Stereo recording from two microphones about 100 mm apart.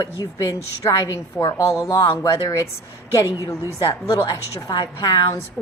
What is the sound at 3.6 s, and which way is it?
A woman's voice, 40° left (ahead or behind).